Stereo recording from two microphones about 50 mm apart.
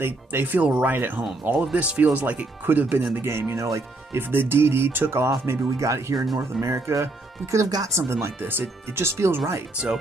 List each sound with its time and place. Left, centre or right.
0.0 s speech: right
0.6 s speech: right
0.9 s speech: right
1.4 s speech: right
3.2 s speech: right
4.2 s speech: right
5.5 s speech: right
6.3 s speech: right
8.4 s speech: right
9.0 s speech: right